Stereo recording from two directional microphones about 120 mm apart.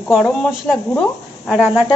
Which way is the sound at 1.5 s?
10° right (ahead or behind).